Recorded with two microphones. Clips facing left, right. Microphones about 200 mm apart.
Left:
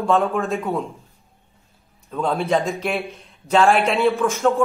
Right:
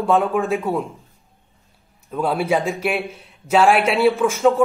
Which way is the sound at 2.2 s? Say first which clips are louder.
Right 1 dB; 10° right (ahead or behind).